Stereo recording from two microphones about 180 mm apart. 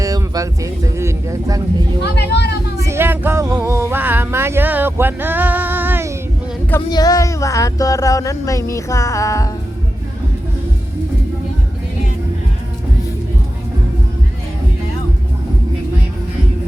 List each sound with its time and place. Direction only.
0.0 s speech: 20° right (ahead or behind)
2.1 s speech: 65° left (ahead or behind)
2.7 s a sound: 15° right (ahead or behind)
6.7 s speech: 15° left (ahead or behind)